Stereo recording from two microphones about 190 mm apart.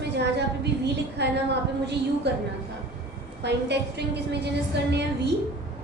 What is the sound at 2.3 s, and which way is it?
A woman's voice, 60° right (ahead or behind).